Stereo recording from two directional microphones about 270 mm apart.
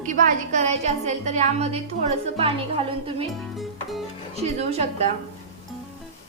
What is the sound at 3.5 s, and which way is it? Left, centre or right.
Music, centre.